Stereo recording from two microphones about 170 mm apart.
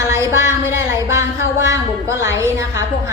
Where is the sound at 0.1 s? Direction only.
15° right (ahead or behind).